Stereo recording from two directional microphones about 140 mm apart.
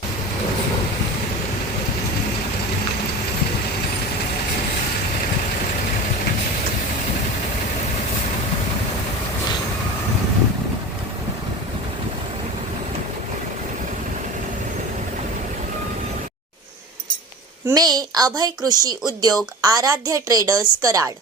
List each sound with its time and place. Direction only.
17.7 s speech: 30° right (ahead or behind)